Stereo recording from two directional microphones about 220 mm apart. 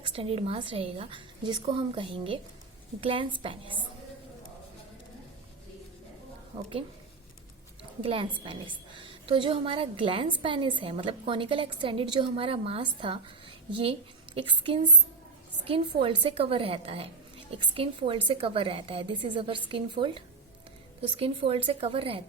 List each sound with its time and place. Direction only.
0.0 s a woman's voice: 25° right (ahead or behind)
6.5 s a woman's voice: 25° right (ahead or behind)
8.0 s a woman's voice: 25° right (ahead or behind)
14.3 s a woman's voice: 20° right (ahead or behind)